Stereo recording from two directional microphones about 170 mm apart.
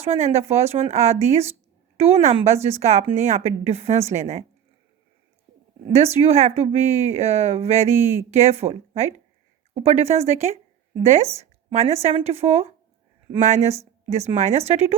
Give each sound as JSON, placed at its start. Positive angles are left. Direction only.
{"t": 0.0, "sound": "speech", "side_deg": -40}
{"t": 5.9, "sound": "speech", "side_deg": -40}